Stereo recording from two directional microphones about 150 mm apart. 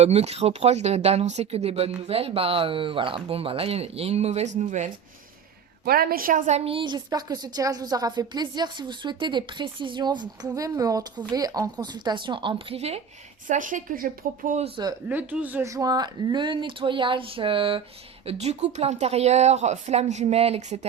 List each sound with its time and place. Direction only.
0.0 s a woman's voice: 45° right (ahead or behind)
5.8 s a woman's voice: 85° right; by 13.0 s 45° right (ahead or behind)
13.5 s speech: 60° right (ahead or behind)
15.1 s a woman's voice: 10° right (ahead or behind); by 20.8 s 50° right (ahead or behind)